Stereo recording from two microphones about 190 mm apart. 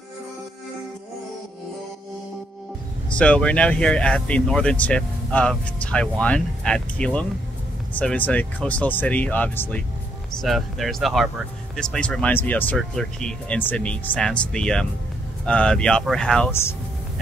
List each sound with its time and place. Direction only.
3.2 s speech: 5° left (ahead or behind)